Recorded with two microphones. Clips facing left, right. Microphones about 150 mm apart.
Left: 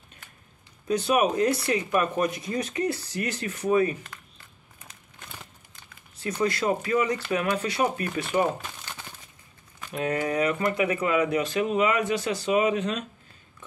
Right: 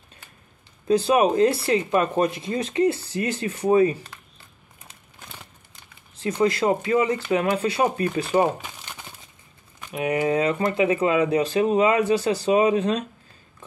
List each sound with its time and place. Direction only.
0.8 s speech: 30° right (ahead or behind)
6.2 s speech: 25° right (ahead or behind)
8.6 s crumpling: 15° right (ahead or behind)
9.8 s speech: 15° right (ahead or behind)
10.3 s speech: 25° right (ahead or behind)